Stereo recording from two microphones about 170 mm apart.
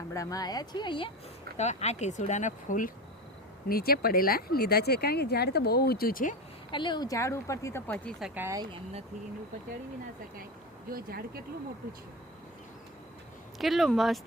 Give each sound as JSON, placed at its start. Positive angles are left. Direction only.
{"t": 0.1, "sound": "speech", "side_deg": 20}
{"t": 1.5, "sound": "speech", "side_deg": 40}
{"t": 3.7, "sound": "speech", "side_deg": 60}
{"t": 6.7, "sound": "speech", "side_deg": 30}
{"t": 8.4, "sound": "speech", "side_deg": -15}
{"t": 8.7, "sound": "speech", "side_deg": -35}
{"t": 10.9, "sound": "speech", "side_deg": -65}
{"t": 13.6, "sound": "speech", "side_deg": 0}